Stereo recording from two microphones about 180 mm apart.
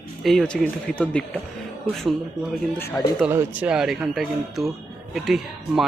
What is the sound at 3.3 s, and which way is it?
Speech, 10° right (ahead or behind).